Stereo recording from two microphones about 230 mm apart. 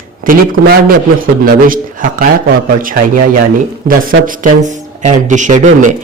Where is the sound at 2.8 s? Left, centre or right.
Right.